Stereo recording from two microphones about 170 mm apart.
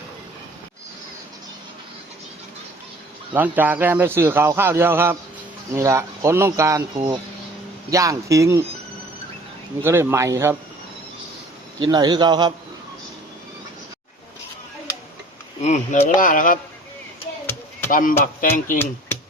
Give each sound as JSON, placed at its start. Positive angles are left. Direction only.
{"t": 3.3, "sound": "speech", "side_deg": -10}
{"t": 6.9, "sound": "speech", "side_deg": -30}
{"t": 7.9, "sound": "speech", "side_deg": -20}
{"t": 9.8, "sound": "speech", "side_deg": -15}
{"t": 11.8, "sound": "a man's voice", "side_deg": -25}
{"t": 15.6, "sound": "speech", "side_deg": 45}
{"t": 17.4, "sound": "a sound", "side_deg": 10}
{"t": 18.3, "sound": "speech", "side_deg": 50}